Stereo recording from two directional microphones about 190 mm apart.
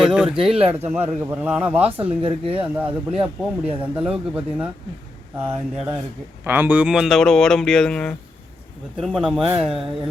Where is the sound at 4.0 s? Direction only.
5° right (ahead or behind).